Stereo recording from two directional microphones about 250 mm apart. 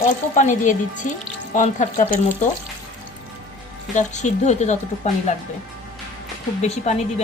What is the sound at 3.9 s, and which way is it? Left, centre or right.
Speech, left.